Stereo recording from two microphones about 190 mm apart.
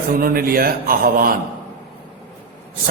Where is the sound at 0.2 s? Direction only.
50° right (ahead or behind).